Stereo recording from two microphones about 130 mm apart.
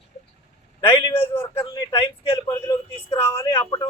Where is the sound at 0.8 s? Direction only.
15° left (ahead or behind).